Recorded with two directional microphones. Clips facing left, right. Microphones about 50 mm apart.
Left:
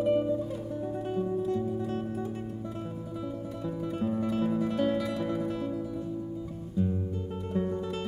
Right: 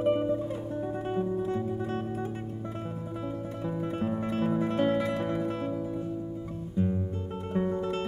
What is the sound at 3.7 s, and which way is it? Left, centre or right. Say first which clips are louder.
Music: even; right.